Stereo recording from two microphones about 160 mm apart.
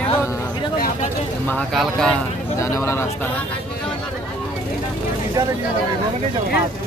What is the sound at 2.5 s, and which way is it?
Speech, 20° left (ahead or behind).